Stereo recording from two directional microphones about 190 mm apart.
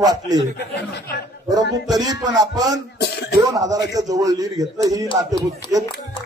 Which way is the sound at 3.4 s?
20° right (ahead or behind).